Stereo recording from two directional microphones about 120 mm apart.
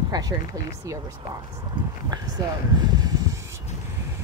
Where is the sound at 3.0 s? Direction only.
35° right (ahead or behind).